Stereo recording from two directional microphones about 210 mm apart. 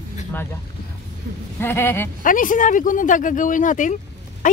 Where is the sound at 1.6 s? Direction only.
10° left (ahead or behind).